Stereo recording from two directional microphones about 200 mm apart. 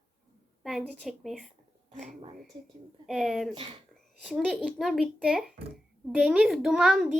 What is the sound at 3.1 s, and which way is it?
A child's voice, centre (ahead or behind).